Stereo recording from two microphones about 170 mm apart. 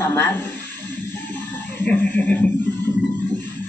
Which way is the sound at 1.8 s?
10° left (ahead or behind).